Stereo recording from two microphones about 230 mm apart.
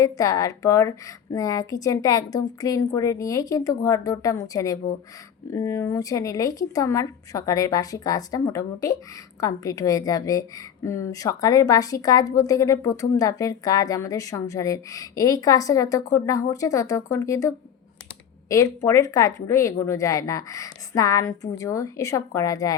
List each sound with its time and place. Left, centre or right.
0.0 s a woman's voice: centre